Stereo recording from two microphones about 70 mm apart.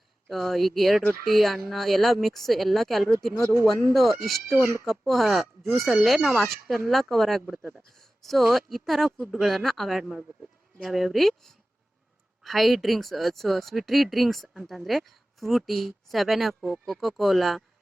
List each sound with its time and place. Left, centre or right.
0.3 s speech: centre
4.5 s speech: right
4.9 s speech: centre